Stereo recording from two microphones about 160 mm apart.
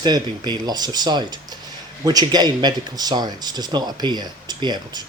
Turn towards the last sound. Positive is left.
turn(degrees=-25)  # may be behind; listen again after turning